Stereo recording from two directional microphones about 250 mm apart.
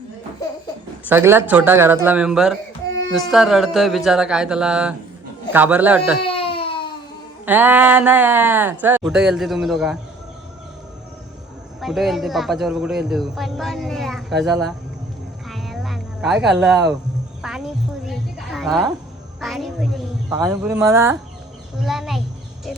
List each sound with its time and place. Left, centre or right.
1.0 s speech: centre
6.3 s baby cry: left
7.4 s speech: centre
11.8 s speech: centre
15.4 s a sound: centre
18.1 s speech: centre
20.3 s speech: centre
21.8 s speech: centre